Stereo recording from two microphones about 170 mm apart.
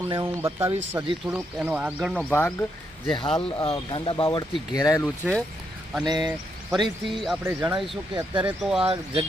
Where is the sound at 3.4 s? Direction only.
25° left (ahead or behind).